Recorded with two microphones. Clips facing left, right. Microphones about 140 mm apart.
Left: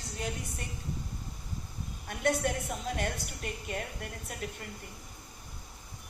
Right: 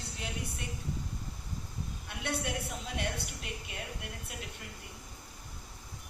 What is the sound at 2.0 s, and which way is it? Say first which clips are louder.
A woman's voice: left 7 dB; 45° left (ahead or behind).